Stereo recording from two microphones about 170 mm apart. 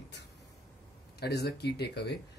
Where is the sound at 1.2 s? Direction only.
70° left (ahead or behind).